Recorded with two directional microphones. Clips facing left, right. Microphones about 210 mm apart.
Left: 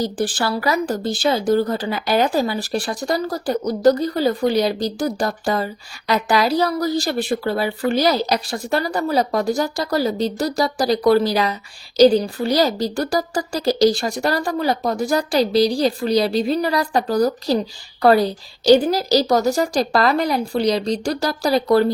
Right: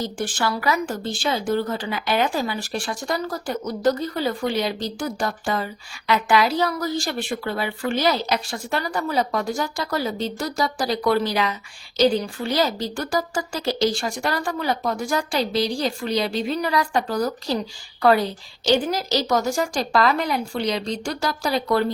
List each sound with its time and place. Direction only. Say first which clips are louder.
0.0 s speech: left 4 dB; 35° left (ahead or behind)